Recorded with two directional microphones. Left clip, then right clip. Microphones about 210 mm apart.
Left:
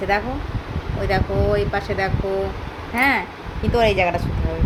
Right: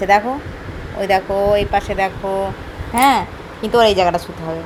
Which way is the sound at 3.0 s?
25° right (ahead or behind).